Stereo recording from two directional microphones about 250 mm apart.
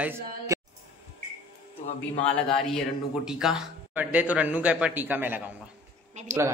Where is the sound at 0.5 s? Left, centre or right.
Centre.